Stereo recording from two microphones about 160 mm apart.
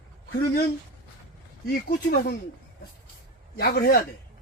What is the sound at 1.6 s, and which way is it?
Speech, 75° left (ahead or behind).